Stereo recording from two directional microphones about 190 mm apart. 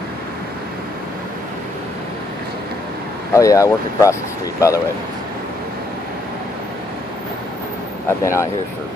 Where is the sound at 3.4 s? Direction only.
15° left (ahead or behind).